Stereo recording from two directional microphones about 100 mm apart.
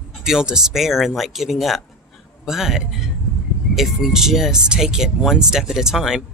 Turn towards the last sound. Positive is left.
turn(degrees=-5)  # may be behind; listen again after turning